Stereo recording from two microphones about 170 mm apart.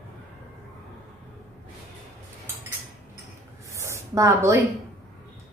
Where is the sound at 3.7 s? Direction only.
15° right (ahead or behind).